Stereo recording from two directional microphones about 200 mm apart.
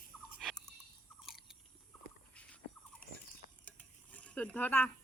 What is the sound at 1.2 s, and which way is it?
Biting, centre (ahead or behind).